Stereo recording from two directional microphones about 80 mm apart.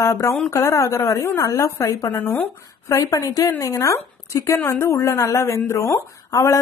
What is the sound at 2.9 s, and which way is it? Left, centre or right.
A woman's voice, left.